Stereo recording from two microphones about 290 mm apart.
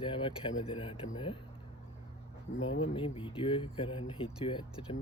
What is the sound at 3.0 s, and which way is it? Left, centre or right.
Speech, centre.